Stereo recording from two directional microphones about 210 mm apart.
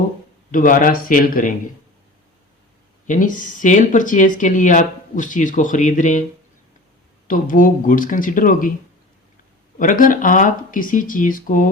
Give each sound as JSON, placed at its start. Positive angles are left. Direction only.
{"t": 0.5, "sound": "speech", "side_deg": 40}
{"t": 3.1, "sound": "speech", "side_deg": 40}
{"t": 7.3, "sound": "speech", "side_deg": 40}
{"t": 9.7, "sound": "speech", "side_deg": 40}